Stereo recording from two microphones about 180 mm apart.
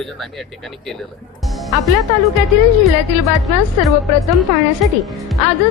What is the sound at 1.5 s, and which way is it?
Music, centre (ahead or behind).